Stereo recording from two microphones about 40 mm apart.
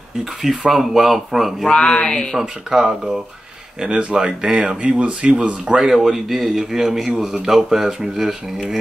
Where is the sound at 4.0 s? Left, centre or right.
Right.